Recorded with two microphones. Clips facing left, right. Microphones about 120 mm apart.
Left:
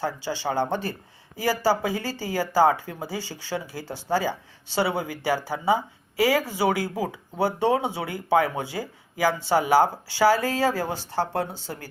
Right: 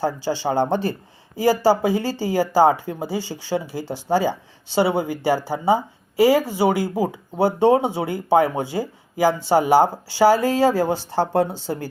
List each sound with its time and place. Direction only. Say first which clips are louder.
0.0 s speech: right 5 dB; 35° right (ahead or behind); by 5.0 s 20° right (ahead or behind)
5.2 s speech: right 3 dB; 35° right (ahead or behind)
6.1 s speech: right 6 dB; 20° right (ahead or behind)
10.4 s speech: right 6 dB; 20° right (ahead or behind)